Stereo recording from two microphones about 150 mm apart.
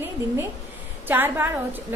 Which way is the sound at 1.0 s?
15° right (ahead or behind).